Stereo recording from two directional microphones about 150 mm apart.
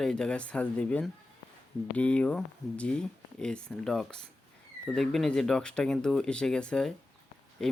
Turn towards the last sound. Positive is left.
turn(degrees=5)  # may be behind; listen again after turning